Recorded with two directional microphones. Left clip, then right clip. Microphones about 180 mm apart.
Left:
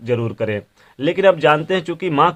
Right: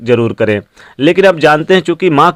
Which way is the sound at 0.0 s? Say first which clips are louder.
Right 10 dB; 40° right (ahead or behind).